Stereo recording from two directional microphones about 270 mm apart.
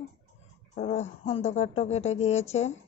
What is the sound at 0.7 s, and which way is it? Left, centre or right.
Speech, left.